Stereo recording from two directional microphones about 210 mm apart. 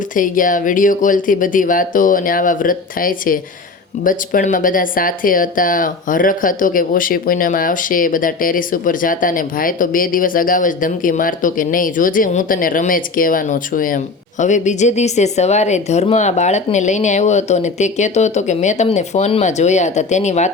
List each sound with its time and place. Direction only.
0.1 s speech: 40° left (ahead or behind)